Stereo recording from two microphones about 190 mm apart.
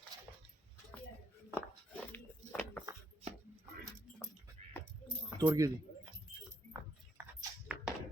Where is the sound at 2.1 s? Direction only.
10° left (ahead or behind).